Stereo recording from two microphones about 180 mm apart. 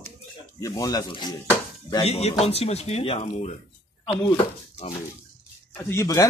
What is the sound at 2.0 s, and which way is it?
Speech, 35° left (ahead or behind).